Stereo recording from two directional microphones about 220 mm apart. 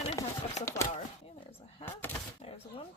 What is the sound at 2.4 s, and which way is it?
Speech, 25° left (ahead or behind).